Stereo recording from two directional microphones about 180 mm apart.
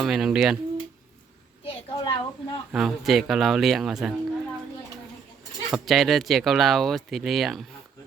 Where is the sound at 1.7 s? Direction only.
30° left (ahead or behind).